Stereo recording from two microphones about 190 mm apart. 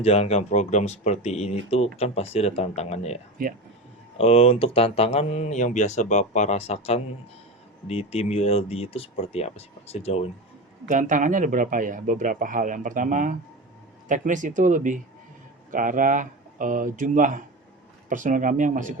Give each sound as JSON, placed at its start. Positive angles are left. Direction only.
{"t": 0.0, "sound": "speech", "side_deg": 30}
{"t": 3.4, "sound": "a man's voice", "side_deg": -45}
{"t": 4.2, "sound": "speech", "side_deg": 30}
{"t": 10.8, "sound": "a man's voice", "side_deg": -40}